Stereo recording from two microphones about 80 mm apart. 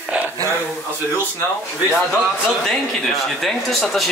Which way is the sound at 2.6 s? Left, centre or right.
Centre.